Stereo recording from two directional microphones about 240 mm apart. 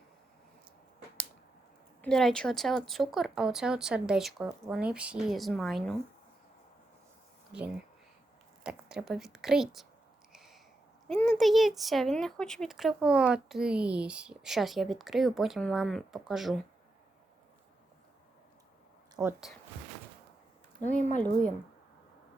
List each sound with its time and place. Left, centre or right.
2.0 s speech: centre
8.6 s speech: centre
10.3 s a sound: centre
11.1 s speech: centre
19.2 s speech: centre
20.8 s speech: left